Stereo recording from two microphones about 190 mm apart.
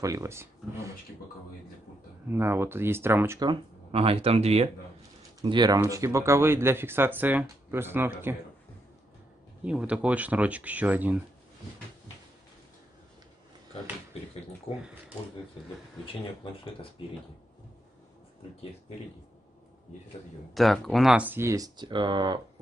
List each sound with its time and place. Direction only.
0.0 s speech: 15° right (ahead or behind)
2.2 s speech: 10° right (ahead or behind)
3.4 s speech: 30° right (ahead or behind)
5.4 s speech: 20° right (ahead or behind)
9.7 s speech: 5° right (ahead or behind)
16.4 s speech: 30° left (ahead or behind)
20.5 s speech: centre (ahead or behind); by 22.4 s 25° right (ahead or behind)